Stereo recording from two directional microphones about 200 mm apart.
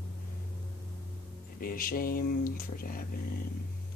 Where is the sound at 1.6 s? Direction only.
45° left (ahead or behind).